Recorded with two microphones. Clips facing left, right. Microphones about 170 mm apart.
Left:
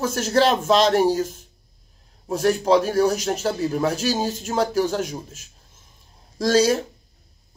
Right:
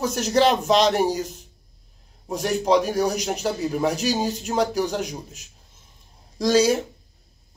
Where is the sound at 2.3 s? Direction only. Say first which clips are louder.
Left 2 dB; 15° right (ahead or behind).